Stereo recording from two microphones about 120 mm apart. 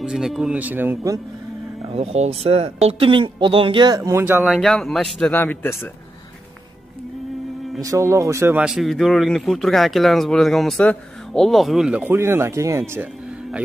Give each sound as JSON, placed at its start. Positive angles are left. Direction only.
{"t": 0.0, "sound": "speech", "side_deg": -5}
{"t": 1.9, "sound": "speech", "side_deg": -60}
{"t": 4.2, "sound": "speech", "side_deg": -15}
{"t": 4.5, "sound": "speech", "side_deg": 5}
{"t": 5.3, "sound": "speech", "side_deg": 15}
{"t": 7.8, "sound": "speech", "side_deg": -25}
{"t": 8.5, "sound": "speech", "side_deg": -5}
{"t": 12.9, "sound": "music", "side_deg": -10}